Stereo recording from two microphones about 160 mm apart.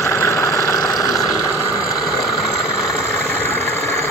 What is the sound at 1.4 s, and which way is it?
Vehicle, 20° left (ahead or behind).